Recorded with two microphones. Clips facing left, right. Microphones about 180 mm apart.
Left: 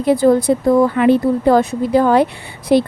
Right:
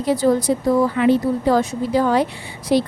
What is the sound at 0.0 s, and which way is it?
Speech, 55° left (ahead or behind).